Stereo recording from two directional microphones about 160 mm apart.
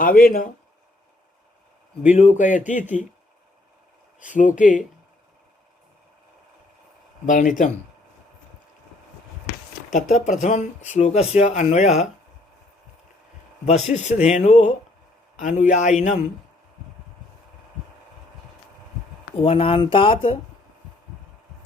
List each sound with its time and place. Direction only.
0.0 s speech: 65° left (ahead or behind)
2.1 s speech: 45° left (ahead or behind)
4.3 s speech: 55° left (ahead or behind)
7.3 s speech: 55° left (ahead or behind)
9.9 s speech: 50° left (ahead or behind)
13.7 s speech: 45° left (ahead or behind)
19.4 s speech: 35° left (ahead or behind)